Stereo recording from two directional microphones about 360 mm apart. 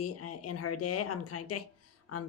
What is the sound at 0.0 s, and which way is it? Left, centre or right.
Speech, left.